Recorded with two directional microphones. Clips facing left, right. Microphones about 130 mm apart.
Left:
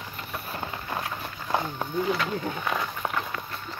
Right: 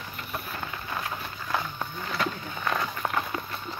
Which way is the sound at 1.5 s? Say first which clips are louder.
Left 4 dB; 25° left (ahead or behind).